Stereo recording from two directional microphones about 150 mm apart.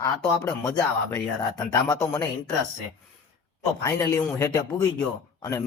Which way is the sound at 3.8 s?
20° left (ahead or behind).